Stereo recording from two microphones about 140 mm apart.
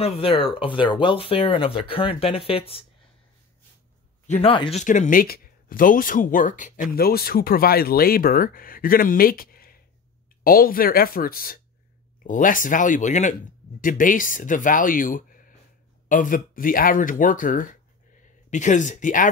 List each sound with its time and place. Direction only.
0.0 s speech: 40° left (ahead or behind)
4.3 s speech: 40° left (ahead or behind)
4.7 s speech: 60° left (ahead or behind); by 11.6 s 90° left
12.2 s speech: 70° left (ahead or behind)
18.5 s speech: 60° left (ahead or behind)